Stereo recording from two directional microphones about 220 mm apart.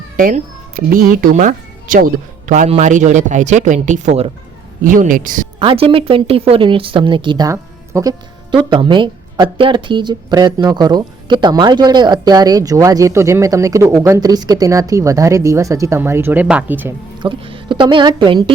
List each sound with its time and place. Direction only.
0.2 s speech: 40° right (ahead or behind)
5.5 s speech: 25° right (ahead or behind); by 16.9 s 10° right (ahead or behind)
17.2 s a woman's voice: 25° right (ahead or behind)